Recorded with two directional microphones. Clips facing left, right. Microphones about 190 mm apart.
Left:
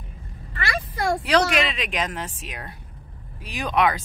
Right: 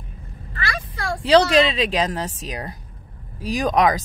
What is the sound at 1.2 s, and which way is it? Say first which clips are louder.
Speech: right 9 dB; 30° right (ahead or behind).